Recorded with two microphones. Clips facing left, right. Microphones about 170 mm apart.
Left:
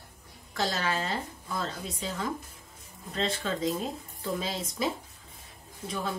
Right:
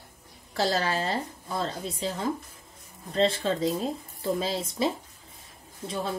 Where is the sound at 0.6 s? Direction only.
35° right (ahead or behind).